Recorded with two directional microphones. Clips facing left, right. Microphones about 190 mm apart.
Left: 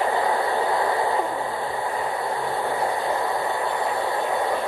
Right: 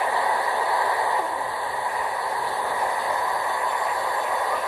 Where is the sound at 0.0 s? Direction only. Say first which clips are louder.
Left 3 dB; 30° left (ahead or behind).